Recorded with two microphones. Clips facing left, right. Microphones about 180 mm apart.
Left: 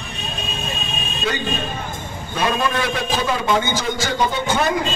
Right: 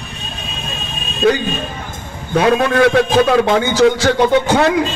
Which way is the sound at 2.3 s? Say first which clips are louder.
Right 8 dB; 70° right (ahead or behind).